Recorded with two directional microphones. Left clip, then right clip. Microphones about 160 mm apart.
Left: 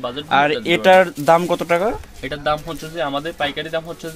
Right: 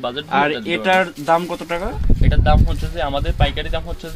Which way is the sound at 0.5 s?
90° left.